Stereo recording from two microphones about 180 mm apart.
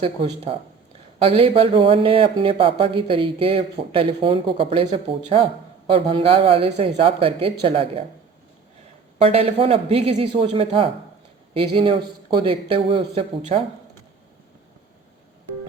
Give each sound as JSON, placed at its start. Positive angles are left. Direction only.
{"t": 0.0, "sound": "speech", "side_deg": -30}
{"t": 9.1, "sound": "a man's voice", "side_deg": -35}